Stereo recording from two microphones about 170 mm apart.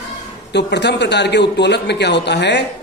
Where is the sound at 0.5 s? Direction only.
85° left.